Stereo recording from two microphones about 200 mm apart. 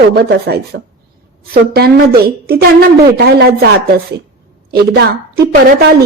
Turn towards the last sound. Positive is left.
turn(degrees=-50)  # may be behind; listen again after turning